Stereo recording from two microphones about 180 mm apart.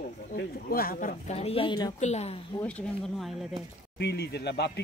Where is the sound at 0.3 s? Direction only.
55° left (ahead or behind); by 2.0 s 25° left (ahead or behind).